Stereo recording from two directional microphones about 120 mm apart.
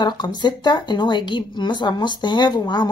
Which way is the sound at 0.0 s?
40° left (ahead or behind).